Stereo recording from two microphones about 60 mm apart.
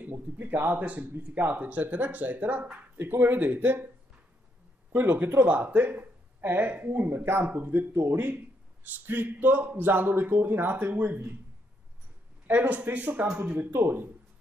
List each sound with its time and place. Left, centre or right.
0.1 s speech: right
4.9 s a man's voice: right
12.4 s a man's voice: right